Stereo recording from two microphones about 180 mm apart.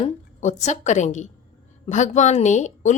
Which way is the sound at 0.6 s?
40° left (ahead or behind).